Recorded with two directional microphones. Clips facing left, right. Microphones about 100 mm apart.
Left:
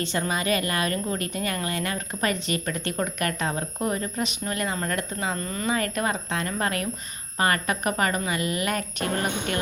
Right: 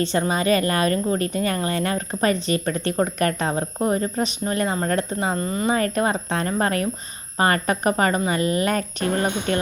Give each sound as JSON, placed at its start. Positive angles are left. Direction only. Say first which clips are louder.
{"t": 0.0, "sound": "a woman's voice", "louder": "right 5 dB", "side_deg": -35}